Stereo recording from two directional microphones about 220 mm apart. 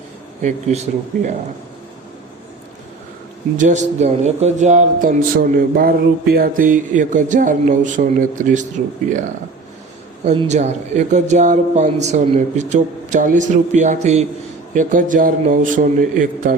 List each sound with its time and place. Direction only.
0.4 s a man's voice: 30° right (ahead or behind)
3.6 s a man's voice: 35° right (ahead or behind)
10.2 s a man's voice: 30° right (ahead or behind)